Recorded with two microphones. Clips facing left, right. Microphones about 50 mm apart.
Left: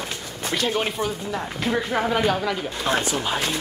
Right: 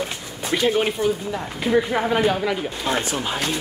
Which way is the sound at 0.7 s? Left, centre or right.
Centre.